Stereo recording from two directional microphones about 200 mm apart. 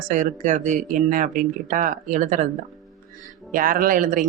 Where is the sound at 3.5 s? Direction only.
45° right (ahead or behind).